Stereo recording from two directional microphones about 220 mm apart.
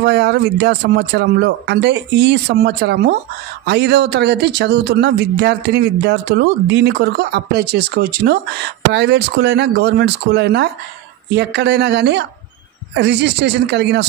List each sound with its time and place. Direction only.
0.0 s speech: 50° right (ahead or behind)